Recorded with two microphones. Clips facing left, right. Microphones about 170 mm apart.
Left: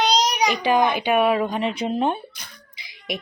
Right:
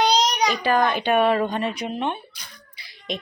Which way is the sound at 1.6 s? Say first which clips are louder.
Left 3 dB; 20° left (ahead or behind).